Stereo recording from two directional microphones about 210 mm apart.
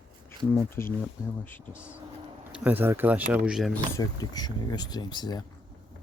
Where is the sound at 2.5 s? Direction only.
10° right (ahead or behind).